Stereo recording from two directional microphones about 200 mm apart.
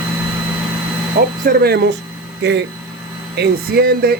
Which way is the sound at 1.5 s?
50° right (ahead or behind).